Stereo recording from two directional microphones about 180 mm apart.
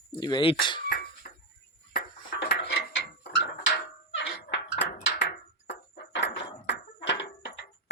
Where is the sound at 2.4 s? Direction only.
70° left (ahead or behind).